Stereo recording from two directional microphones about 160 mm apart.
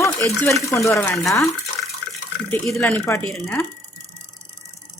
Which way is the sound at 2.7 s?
15° left (ahead or behind).